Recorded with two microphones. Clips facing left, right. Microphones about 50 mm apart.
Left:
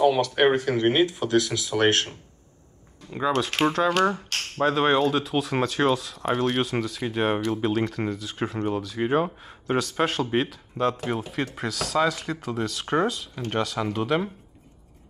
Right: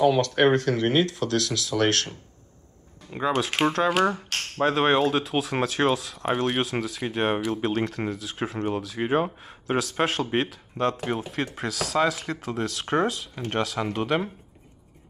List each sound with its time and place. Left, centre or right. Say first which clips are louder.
0.0 s speech: even; centre; by 2.0 s left
3.1 s speech: left 1 dB; centre